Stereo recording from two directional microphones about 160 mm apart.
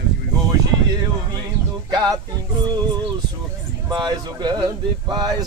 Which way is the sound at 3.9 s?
25° right (ahead or behind).